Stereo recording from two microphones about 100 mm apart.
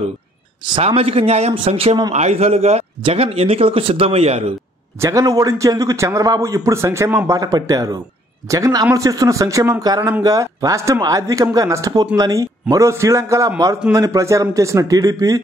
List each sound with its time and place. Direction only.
0.7 s speech: 70° right (ahead or behind)
2.2 s speech: 90° right
5.0 s a man's voice: 35° right (ahead or behind)